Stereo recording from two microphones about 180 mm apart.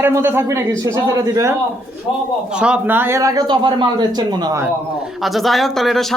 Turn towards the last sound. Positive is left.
turn(degrees=0)  # may be behind; listen again after turning